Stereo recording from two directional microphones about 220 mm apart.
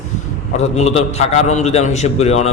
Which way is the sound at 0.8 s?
30° left (ahead or behind).